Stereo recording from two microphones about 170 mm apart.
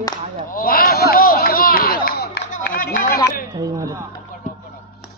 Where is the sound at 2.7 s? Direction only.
55° left (ahead or behind).